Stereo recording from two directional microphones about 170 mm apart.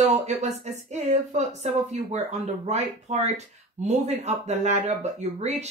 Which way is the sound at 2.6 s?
40° right (ahead or behind).